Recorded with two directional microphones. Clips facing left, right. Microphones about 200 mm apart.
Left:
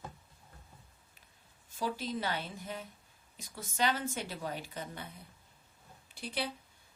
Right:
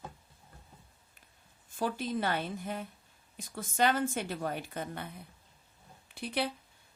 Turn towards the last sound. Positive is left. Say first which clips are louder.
# right 4 dB
turn(degrees=-60)  # may be behind; listen again after turning